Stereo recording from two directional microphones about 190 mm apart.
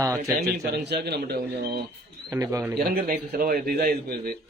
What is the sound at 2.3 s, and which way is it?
Speech, 15° right (ahead or behind).